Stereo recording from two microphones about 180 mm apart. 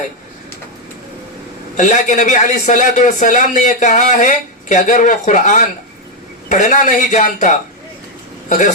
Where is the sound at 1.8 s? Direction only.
40° left (ahead or behind).